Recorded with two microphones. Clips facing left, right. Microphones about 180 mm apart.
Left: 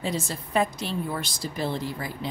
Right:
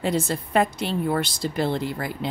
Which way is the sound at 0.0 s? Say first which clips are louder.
Right 6 dB; 60° right (ahead or behind).